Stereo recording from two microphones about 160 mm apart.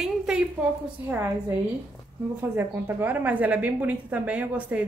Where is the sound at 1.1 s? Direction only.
15° right (ahead or behind).